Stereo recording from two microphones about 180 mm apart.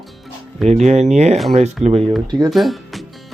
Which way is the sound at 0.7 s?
40° right (ahead or behind).